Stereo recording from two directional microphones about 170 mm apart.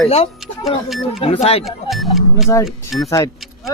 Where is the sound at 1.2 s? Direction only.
35° left (ahead or behind).